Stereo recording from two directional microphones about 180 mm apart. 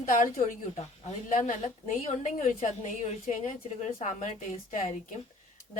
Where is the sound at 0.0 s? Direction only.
45° left (ahead or behind).